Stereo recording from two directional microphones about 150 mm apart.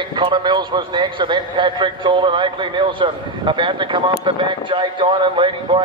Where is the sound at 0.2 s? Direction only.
30° right (ahead or behind).